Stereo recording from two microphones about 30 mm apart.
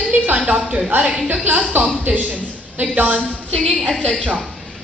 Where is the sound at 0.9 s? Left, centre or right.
Right.